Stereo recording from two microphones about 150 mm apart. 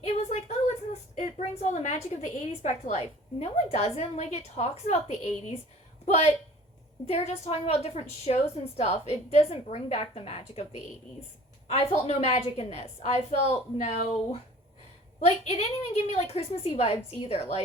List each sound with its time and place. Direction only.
0.0 s a sound: 50° left (ahead or behind)
2.2 s a woman's voice: 50° left (ahead or behind)
15.2 s a woman's voice: 45° left (ahead or behind)